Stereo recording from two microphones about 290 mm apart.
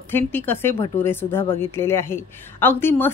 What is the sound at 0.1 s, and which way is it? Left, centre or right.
A woman's voice, centre.